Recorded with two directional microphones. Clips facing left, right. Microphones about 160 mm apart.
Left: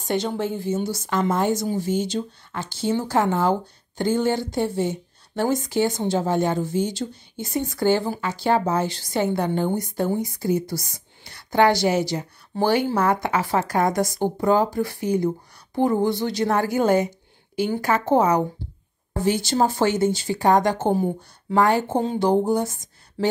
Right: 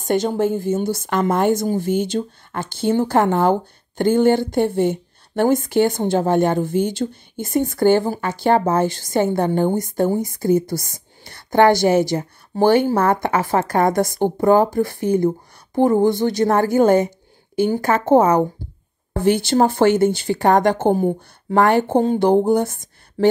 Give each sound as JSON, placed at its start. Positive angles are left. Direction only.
{"t": 0.0, "sound": "a woman's voice", "side_deg": -45}